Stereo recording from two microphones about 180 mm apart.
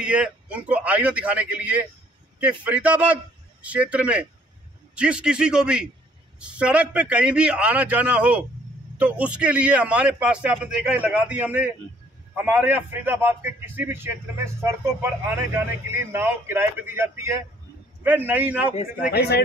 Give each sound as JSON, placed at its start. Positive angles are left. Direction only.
{"t": 0.0, "sound": "a man's voice", "side_deg": -5}
{"t": 18.9, "sound": "speech", "side_deg": 60}